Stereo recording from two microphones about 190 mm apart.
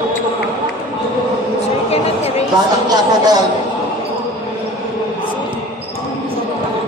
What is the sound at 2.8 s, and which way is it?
Speech, 20° right (ahead or behind).